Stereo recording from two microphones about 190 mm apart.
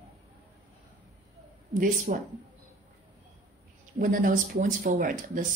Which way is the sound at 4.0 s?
45° right (ahead or behind).